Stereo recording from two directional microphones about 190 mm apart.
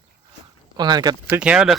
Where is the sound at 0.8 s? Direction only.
20° right (ahead or behind).